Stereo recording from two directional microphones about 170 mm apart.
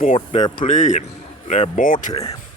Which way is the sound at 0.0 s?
40° left (ahead or behind).